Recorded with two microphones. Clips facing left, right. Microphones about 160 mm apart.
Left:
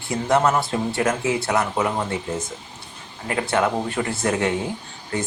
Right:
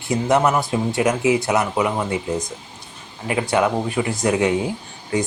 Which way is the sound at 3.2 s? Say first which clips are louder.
Right 2 dB; 15° right (ahead or behind).